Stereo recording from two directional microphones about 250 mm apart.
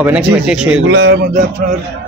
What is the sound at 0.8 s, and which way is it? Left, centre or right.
Speech, right.